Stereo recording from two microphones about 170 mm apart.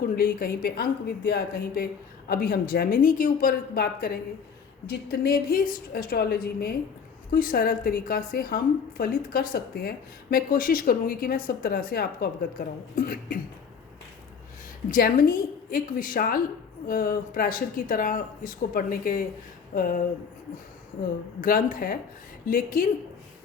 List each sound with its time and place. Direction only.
0.0 s a woman's voice: 60° left (ahead or behind)
14.8 s a woman's voice: 55° left (ahead or behind)
21.4 s a woman's voice: 55° left (ahead or behind)